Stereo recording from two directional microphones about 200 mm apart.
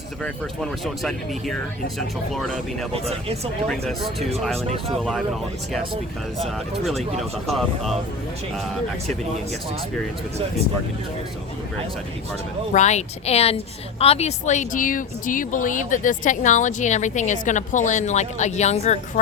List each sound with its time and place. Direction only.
0.2 s speech: centre (ahead or behind)
2.9 s speech: 30° right (ahead or behind)
3.7 s speech: centre (ahead or behind)
6.4 s speech: centre (ahead or behind)
12.7 s speech: 35° left (ahead or behind)